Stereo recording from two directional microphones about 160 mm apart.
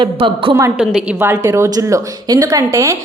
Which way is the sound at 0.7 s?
10° right (ahead or behind).